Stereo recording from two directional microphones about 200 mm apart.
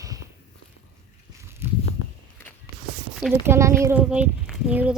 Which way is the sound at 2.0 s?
90° left.